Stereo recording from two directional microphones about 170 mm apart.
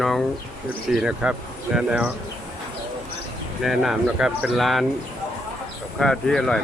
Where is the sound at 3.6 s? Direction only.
Centre (ahead or behind).